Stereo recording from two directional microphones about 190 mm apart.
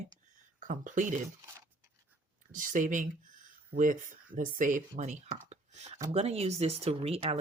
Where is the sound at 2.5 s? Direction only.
45° right (ahead or behind).